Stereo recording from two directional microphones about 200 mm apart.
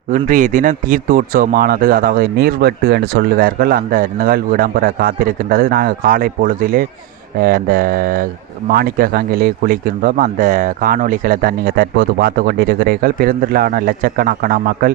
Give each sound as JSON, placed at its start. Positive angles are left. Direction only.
{"t": 0.3, "sound": "speech", "side_deg": -40}